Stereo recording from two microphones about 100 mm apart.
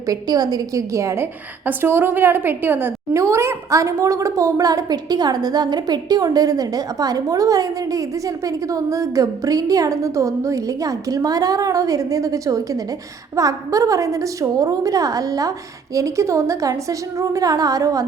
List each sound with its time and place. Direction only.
0.1 s a woman's voice: 40° right (ahead or behind)